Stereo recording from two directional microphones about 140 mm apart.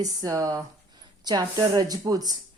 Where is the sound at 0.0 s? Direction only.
25° right (ahead or behind).